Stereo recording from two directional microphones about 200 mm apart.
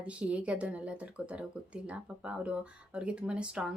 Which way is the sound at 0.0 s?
5° right (ahead or behind).